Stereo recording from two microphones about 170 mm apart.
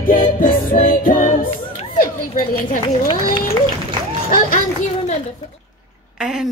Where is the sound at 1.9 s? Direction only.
55° left (ahead or behind).